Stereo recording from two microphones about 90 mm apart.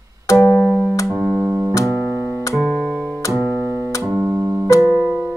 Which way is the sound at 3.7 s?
5° right (ahead or behind).